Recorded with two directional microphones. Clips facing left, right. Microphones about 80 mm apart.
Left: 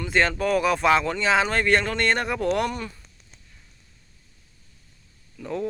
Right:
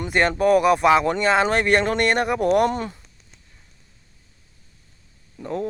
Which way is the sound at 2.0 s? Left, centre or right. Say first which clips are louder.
Right 4 dB; centre.